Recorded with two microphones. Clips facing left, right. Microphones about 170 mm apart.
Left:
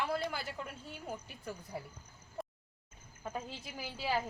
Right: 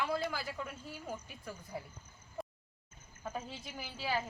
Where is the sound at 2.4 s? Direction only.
Centre (ahead or behind).